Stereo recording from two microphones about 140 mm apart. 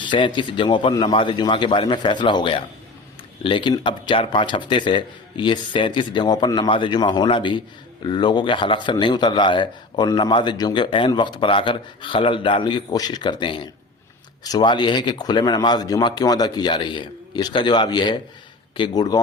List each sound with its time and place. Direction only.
0.0 s speech: 35° left (ahead or behind)